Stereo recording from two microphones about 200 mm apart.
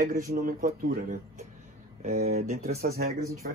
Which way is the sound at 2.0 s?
35° right (ahead or behind).